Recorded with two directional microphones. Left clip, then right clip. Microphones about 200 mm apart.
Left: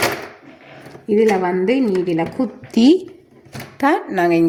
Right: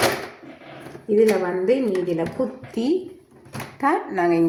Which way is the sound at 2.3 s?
50° left (ahead or behind).